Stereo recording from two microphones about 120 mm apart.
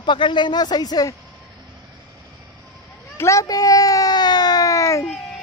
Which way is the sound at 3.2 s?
25° left (ahead or behind).